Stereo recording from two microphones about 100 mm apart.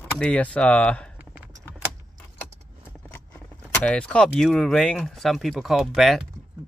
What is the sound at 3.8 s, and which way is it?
Speech, 10° left (ahead or behind).